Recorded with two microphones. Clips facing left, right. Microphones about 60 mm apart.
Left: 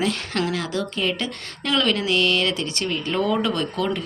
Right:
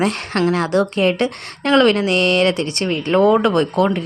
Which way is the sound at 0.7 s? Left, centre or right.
Right.